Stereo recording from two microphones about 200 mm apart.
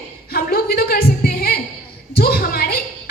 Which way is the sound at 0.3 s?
50° left (ahead or behind).